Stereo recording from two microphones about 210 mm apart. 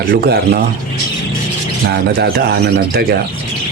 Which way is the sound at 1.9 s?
50° right (ahead or behind).